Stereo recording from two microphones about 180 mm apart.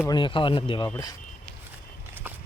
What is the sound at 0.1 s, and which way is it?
Speech, 25° left (ahead or behind).